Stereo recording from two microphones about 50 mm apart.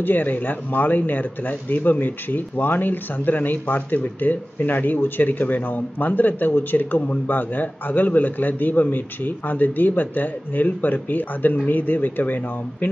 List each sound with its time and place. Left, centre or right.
0.0 s speech: left